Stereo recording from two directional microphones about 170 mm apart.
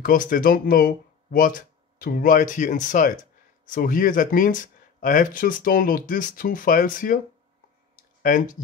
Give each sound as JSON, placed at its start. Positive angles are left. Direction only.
{"t": 0.0, "sound": "speech", "side_deg": 55}
{"t": 8.2, "sound": "speech", "side_deg": 50}